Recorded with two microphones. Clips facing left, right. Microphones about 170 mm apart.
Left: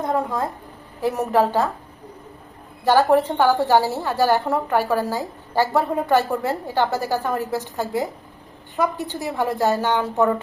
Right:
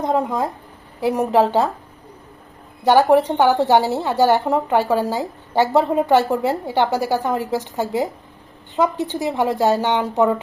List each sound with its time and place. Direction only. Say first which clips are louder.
0.0 s a woman's voice: right 3 dB; 20° right (ahead or behind)
2.8 s a woman's voice: right 3 dB; 15° right (ahead or behind)